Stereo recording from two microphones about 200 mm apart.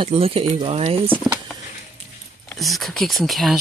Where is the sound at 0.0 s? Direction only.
30° right (ahead or behind).